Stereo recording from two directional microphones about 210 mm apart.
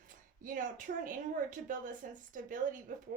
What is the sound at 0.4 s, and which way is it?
Speech, 40° right (ahead or behind).